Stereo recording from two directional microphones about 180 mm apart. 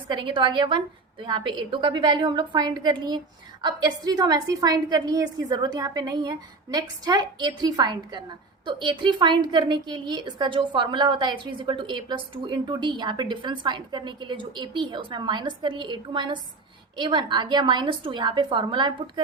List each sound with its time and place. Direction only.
0.1 s a woman's voice: 25° right (ahead or behind)